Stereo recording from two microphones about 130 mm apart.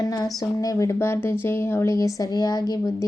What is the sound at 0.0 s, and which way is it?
A woman's voice, 30° left (ahead or behind).